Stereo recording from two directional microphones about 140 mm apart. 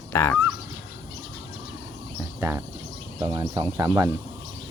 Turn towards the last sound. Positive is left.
turn(degrees=-25)  # may be behind; listen again after turning